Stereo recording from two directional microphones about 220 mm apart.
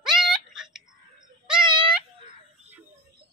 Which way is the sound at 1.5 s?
5° right (ahead or behind).